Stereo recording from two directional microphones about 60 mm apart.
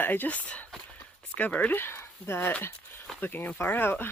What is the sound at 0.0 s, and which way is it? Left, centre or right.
Speech, left.